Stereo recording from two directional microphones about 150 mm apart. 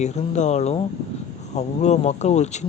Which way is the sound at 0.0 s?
50° left (ahead or behind).